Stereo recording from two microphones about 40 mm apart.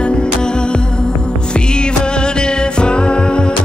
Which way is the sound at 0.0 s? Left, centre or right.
Left.